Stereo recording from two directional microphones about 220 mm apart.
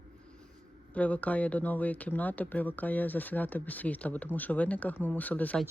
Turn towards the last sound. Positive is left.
turn(degrees=5)  # may be behind; listen again after turning